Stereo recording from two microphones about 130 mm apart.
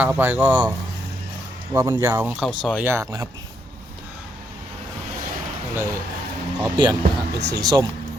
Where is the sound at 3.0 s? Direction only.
30° right (ahead or behind).